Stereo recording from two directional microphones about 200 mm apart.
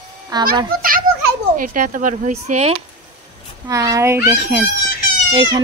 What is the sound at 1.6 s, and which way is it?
Speech, 40° right (ahead or behind).